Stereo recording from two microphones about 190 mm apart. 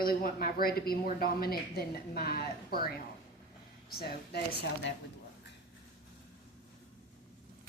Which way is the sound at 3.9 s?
55° left (ahead or behind).